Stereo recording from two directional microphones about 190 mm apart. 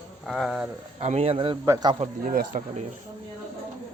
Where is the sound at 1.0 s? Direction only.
35° right (ahead or behind).